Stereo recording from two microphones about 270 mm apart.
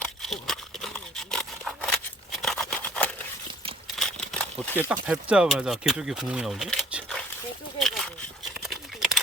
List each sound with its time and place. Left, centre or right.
0.0 s a sound: centre
5.0 s speech: centre
8.7 s typing: centre